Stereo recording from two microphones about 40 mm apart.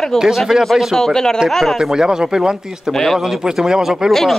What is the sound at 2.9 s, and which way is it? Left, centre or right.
Speech, centre.